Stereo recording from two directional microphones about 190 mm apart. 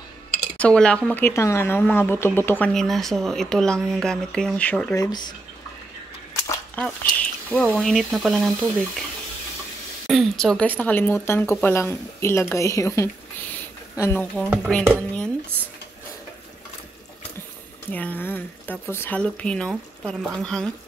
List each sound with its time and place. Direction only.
0.6 s speech: 5° left (ahead or behind)
4.9 s speech: 20° left (ahead or behind)
6.7 s speech: 5° left (ahead or behind)
10.0 s a woman's voice: centre (ahead or behind)
17.9 s speech: 10° left (ahead or behind)